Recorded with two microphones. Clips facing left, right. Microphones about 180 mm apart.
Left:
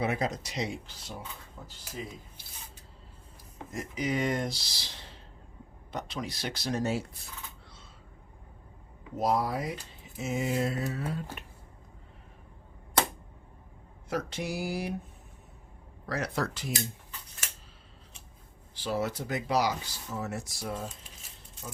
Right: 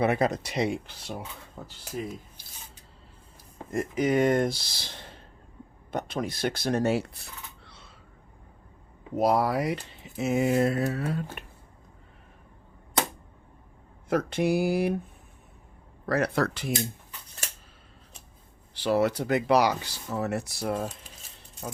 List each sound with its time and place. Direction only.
0.0 s speech: 60° right (ahead or behind)
2.0 s speech: 55° right (ahead or behind)
3.7 s speech: 55° right (ahead or behind)
7.6 s a sound: 70° right (ahead or behind)
9.1 s speech: 70° right (ahead or behind)
14.1 s speech: 55° right (ahead or behind)
16.0 s speech: 60° right (ahead or behind)
18.7 s speech: 70° right (ahead or behind)